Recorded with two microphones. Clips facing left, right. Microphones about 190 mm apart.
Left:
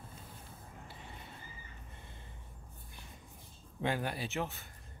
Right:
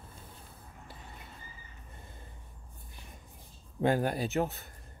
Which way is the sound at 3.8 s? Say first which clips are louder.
Right 7 dB; 45° right (ahead or behind).